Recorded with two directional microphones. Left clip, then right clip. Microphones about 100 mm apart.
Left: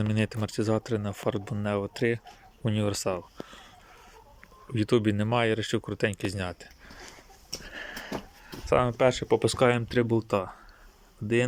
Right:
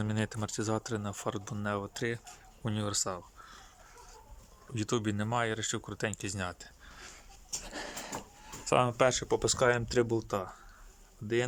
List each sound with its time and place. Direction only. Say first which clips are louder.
0.0 s speech: left 5 dB; 5° left (ahead or behind)
2.9 s speech: left 5 dB; 20° left (ahead or behind)
4.7 s speech: left 8 dB; centre (ahead or behind)
7.7 s a sound: left 3 dB; 55° right (ahead or behind)
8.4 s a sound: left 3 dB; 20° right (ahead or behind)
9.0 s speech: left 5 dB; centre (ahead or behind)
9.9 s speech: left 3 dB; 10° right (ahead or behind)
10.2 s speech: left 6 dB; 10° left (ahead or behind)